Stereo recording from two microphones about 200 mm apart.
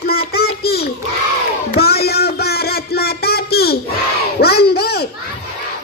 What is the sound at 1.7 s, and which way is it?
Music, 50° left (ahead or behind).